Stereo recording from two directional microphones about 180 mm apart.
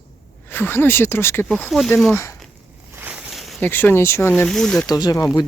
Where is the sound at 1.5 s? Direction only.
Centre (ahead or behind).